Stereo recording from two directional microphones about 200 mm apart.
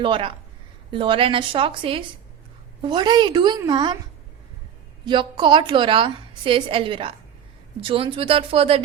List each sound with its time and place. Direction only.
0.0 s a woman's voice: 25° right (ahead or behind)
5.0 s a woman's voice: 25° right (ahead or behind)